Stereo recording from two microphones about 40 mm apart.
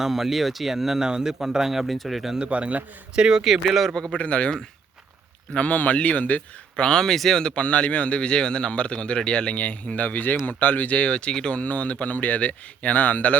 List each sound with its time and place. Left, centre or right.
0.0 s speech: centre
2.4 s a man's voice: right
3.4 s speech: centre
3.8 s a man's voice: centre
4.2 s speech: left
5.5 s speech: left
6.7 s speech: centre
7.4 s a man's voice: left
9.6 s speech: left
10.9 s a man's voice: left
11.5 s speech: left